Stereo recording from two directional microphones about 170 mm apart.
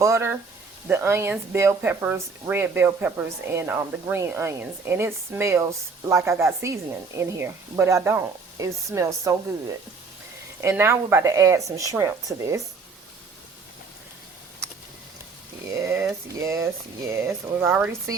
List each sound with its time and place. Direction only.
0.0 s speech: 15° right (ahead or behind)
16.4 s speech: 20° right (ahead or behind)